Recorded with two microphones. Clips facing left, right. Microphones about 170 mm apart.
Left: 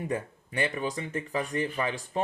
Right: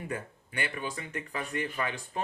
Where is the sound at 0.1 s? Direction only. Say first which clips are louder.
Left 5 dB; 35° left (ahead or behind).